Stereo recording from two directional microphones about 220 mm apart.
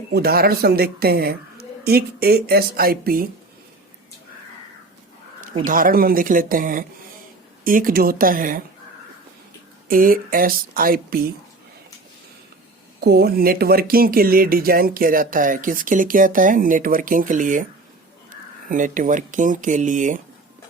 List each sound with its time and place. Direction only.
0.1 s a woman's voice: 45° right (ahead or behind)
5.6 s speech: 40° right (ahead or behind)
9.9 s speech: 40° right (ahead or behind)
13.0 s speech: 45° right (ahead or behind)
18.7 s speech: 35° right (ahead or behind)